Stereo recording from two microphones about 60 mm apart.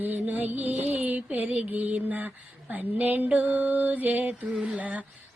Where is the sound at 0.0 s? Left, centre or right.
Right.